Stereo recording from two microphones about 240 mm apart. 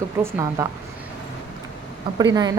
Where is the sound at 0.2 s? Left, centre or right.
Centre.